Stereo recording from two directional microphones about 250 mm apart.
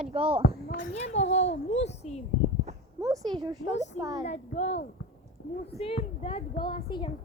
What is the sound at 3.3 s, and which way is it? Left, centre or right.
Speech, centre.